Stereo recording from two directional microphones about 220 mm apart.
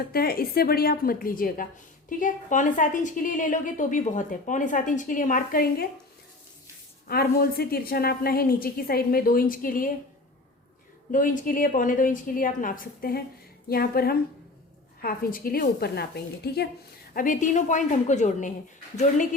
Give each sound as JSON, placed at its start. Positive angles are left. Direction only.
{"t": 0.1, "sound": "a woman's voice", "side_deg": 45}
{"t": 7.1, "sound": "a woman's voice", "side_deg": 45}
{"t": 11.1, "sound": "a woman's voice", "side_deg": 40}
{"t": 17.2, "sound": "a woman's voice", "side_deg": 35}